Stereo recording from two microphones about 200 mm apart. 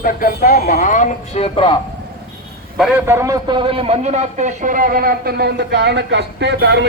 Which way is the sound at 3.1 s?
15° right (ahead or behind).